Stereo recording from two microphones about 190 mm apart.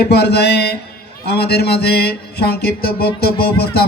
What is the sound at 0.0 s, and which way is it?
A man's voice, 60° left (ahead or behind).